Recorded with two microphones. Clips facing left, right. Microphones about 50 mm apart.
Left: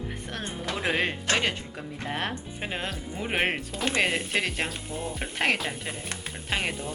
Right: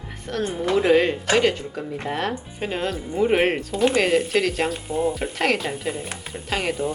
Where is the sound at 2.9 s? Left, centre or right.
Centre.